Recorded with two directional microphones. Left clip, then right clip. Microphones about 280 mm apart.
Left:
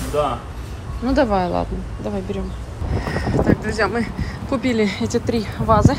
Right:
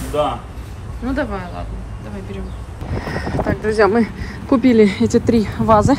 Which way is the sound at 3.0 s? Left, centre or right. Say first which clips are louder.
Left 1 dB; centre.